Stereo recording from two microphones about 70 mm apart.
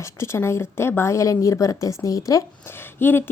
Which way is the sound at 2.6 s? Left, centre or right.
Left.